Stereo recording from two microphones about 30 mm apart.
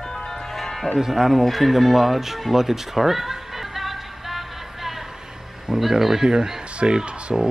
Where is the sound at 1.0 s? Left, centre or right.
Centre.